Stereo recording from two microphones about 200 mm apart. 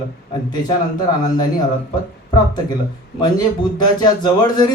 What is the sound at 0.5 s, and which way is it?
Speech, 20° left (ahead or behind).